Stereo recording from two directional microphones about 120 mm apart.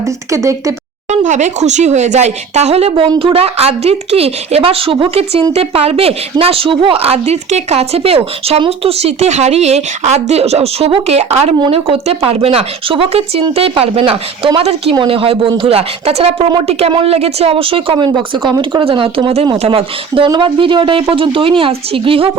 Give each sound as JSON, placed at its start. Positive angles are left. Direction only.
{"t": 0.3, "sound": "a woman's voice", "side_deg": -25}
{"t": 1.1, "sound": "a woman's voice", "side_deg": -85}
{"t": 11.7, "sound": "speech", "side_deg": -50}